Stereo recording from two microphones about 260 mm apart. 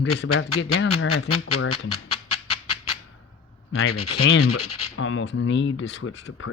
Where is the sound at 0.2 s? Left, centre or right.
Left.